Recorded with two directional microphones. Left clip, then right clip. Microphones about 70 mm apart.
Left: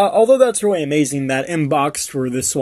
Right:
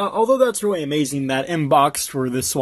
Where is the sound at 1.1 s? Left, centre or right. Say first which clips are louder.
Left 2 dB; right.